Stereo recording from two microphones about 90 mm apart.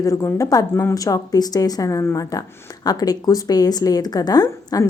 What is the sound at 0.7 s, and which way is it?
A woman's voice, 30° left (ahead or behind).